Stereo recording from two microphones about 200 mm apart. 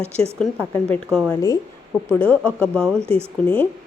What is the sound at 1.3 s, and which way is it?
A woman's voice, 15° left (ahead or behind).